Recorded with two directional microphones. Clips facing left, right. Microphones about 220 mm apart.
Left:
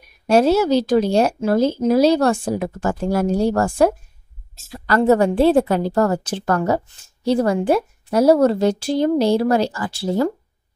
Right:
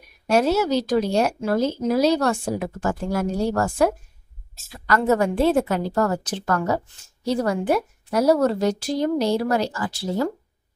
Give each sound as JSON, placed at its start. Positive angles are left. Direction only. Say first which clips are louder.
{"t": 0.3, "sound": "a woman's voice", "louder": "left 5 dB", "side_deg": 30}